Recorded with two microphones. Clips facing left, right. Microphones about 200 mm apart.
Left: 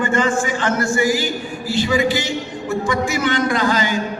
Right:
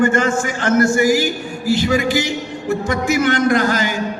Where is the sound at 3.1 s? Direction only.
45° right (ahead or behind).